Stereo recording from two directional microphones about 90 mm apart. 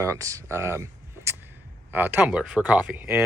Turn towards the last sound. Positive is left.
turn(degrees=-20)  # may be behind; listen again after turning